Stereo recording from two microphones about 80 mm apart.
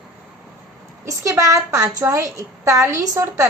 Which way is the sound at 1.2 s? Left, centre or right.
Right.